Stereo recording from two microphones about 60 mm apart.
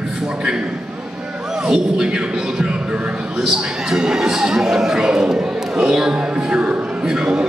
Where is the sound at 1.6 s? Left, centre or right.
Centre.